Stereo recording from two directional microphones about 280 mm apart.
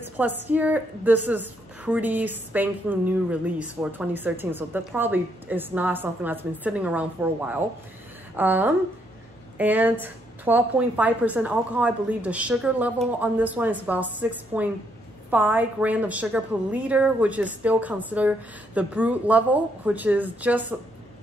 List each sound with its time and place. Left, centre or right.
0.0 s a woman's voice: centre